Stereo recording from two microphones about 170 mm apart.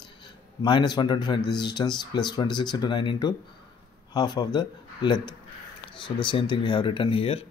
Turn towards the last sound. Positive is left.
turn(degrees=35)  # may be behind; listen again after turning